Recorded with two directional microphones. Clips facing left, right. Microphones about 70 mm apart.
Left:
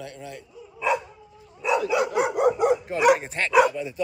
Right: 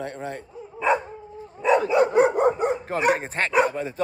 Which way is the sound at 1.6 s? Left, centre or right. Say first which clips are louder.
Right 4 dB; right.